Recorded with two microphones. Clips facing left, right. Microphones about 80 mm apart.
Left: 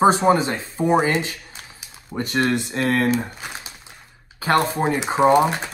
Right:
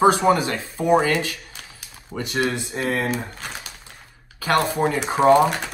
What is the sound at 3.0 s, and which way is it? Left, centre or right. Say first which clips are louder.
Crumpling: left 4 dB; centre.